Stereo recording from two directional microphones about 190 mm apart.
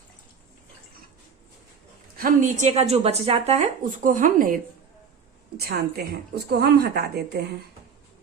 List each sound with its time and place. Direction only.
2.1 s speech: 45° right (ahead or behind)
5.5 s a woman's voice: 55° right (ahead or behind)